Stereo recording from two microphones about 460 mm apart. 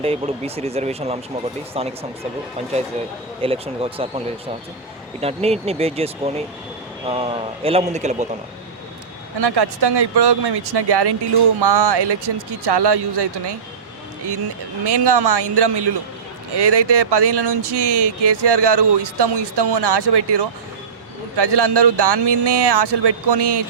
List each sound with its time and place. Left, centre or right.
0.0 s a man's voice: centre
3.4 s a man's voice: centre
5.2 s a man's voice: centre
9.4 s speech: right
14.8 s speech: right